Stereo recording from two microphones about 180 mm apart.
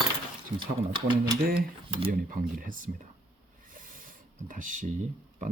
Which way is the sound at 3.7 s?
50° right (ahead or behind).